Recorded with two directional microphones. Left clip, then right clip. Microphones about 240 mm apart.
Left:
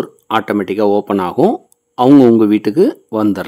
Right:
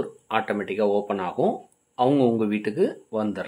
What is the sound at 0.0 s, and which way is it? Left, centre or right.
Speech, left.